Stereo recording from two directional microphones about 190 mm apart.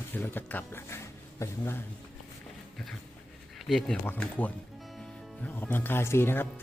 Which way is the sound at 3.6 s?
Centre (ahead or behind).